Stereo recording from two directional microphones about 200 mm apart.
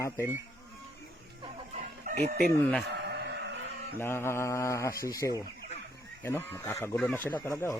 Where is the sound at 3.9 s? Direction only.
10° left (ahead or behind).